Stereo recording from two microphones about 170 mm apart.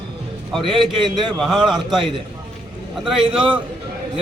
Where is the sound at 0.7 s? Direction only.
30° right (ahead or behind).